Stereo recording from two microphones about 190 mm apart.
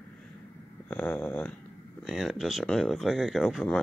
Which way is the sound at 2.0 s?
Centre (ahead or behind).